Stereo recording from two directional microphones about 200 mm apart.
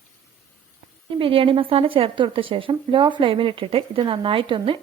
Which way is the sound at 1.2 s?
25° right (ahead or behind).